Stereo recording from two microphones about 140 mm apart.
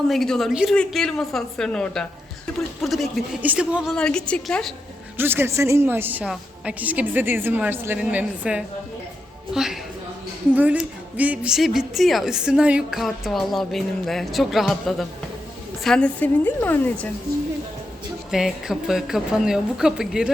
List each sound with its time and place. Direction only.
0.1 s a woman's voice: centre (ahead or behind)
3.4 s a woman's voice: 10° right (ahead or behind)
3.9 s a woman's voice: 5° left (ahead or behind)
5.1 s a woman's voice: 15° right (ahead or behind); by 17.1 s 15° left (ahead or behind)
18.3 s a woman's voice: 5° right (ahead or behind)